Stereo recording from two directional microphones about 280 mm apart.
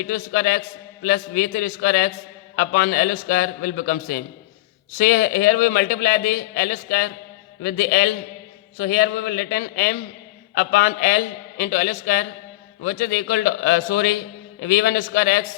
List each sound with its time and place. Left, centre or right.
0.0 s a man's voice: left